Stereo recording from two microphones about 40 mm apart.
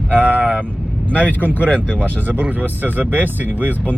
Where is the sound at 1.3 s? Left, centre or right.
Left.